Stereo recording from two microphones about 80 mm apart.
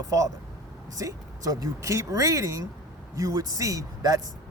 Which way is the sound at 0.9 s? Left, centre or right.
Right.